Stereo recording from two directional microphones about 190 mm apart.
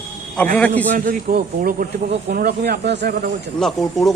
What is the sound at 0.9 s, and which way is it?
Speech, 45° right (ahead or behind).